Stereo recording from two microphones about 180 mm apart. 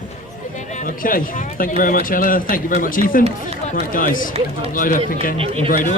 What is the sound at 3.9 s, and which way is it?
A man's voice, 50° left (ahead or behind).